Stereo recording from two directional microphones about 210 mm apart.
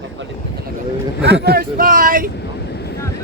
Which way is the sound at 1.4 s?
45° right (ahead or behind).